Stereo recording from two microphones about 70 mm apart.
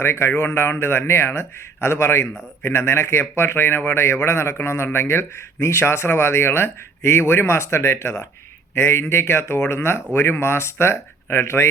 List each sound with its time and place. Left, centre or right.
0.0 s speech: left